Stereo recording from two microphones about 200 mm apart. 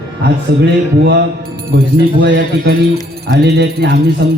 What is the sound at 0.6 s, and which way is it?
Music, 55° right (ahead or behind).